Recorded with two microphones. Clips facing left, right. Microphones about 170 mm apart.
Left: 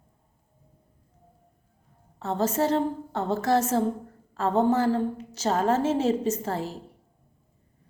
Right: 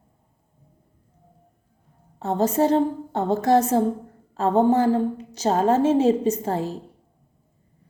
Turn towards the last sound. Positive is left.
turn(degrees=-15)  # may be behind; listen again after turning